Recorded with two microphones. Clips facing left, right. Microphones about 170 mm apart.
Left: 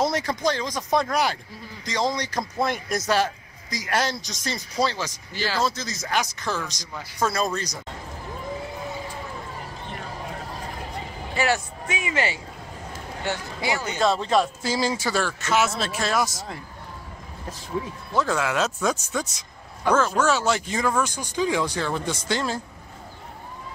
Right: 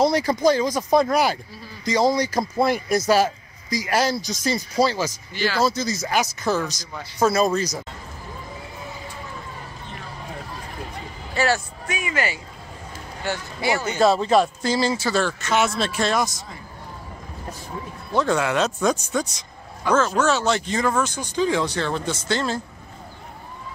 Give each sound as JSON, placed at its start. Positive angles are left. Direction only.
{"t": 0.0, "sound": "speech", "side_deg": 0}
{"t": 11.3, "sound": "speech", "side_deg": 20}
{"t": 13.9, "sound": "speech", "side_deg": -5}
{"t": 18.1, "sound": "speech", "side_deg": 0}